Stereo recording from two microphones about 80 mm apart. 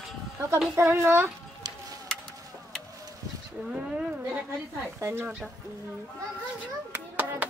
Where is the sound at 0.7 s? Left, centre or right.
Right.